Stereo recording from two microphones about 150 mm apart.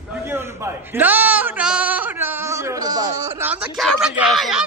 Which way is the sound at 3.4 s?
10° right (ahead or behind).